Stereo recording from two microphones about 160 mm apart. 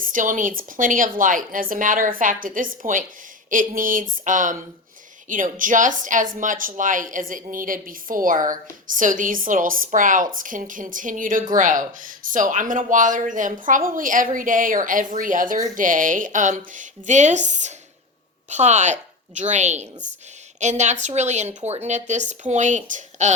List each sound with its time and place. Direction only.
0.0 s a woman's voice: 55° right (ahead or behind)